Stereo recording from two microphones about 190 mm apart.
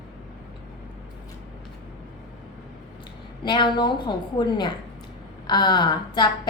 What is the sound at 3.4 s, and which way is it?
A woman's voice, 25° left (ahead or behind).